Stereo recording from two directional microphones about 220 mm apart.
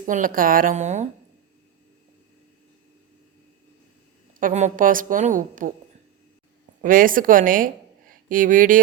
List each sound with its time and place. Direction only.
0.0 s a woman's voice: 35° right (ahead or behind)
4.4 s a woman's voice: 35° right (ahead or behind)
6.8 s a woman's voice: 40° right (ahead or behind)